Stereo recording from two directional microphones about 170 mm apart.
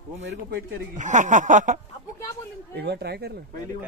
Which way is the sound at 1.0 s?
45° right (ahead or behind).